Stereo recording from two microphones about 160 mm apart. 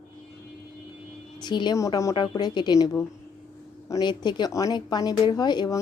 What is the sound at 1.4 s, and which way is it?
Speech, 30° left (ahead or behind).